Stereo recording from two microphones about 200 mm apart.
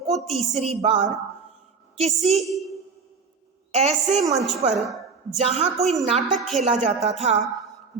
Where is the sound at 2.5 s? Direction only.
Centre (ahead or behind).